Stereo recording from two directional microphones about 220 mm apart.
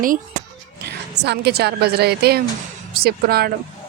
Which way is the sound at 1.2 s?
50° right (ahead or behind).